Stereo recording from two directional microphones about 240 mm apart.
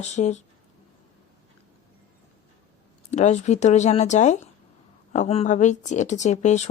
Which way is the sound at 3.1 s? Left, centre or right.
Left.